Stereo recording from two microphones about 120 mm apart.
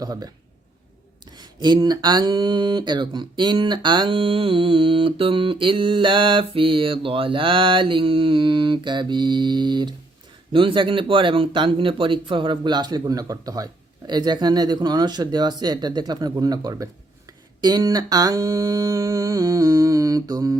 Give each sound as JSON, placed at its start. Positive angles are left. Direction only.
{"t": 0.0, "sound": "speech", "side_deg": -35}
{"t": 1.4, "sound": "speech", "side_deg": -35}
{"t": 16.3, "sound": "a sound", "side_deg": -30}